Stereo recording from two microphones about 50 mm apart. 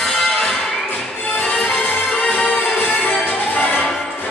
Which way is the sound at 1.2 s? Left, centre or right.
Left.